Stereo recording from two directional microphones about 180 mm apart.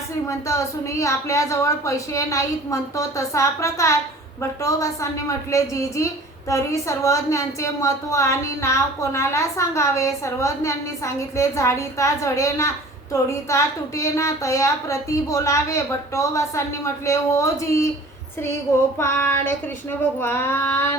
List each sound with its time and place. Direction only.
0.3 s a woman's voice: 15° left (ahead or behind)
18.9 s a woman's voice: 10° left (ahead or behind)